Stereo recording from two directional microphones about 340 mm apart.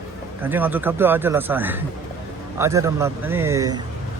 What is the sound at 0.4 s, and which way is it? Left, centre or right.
A man's voice, centre.